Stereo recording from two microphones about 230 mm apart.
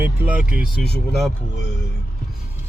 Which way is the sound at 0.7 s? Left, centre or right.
Left.